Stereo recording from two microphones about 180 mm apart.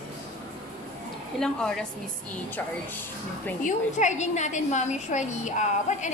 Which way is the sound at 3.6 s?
40° left (ahead or behind).